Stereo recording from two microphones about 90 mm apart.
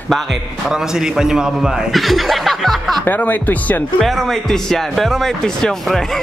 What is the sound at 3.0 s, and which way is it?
Speech, 20° left (ahead or behind).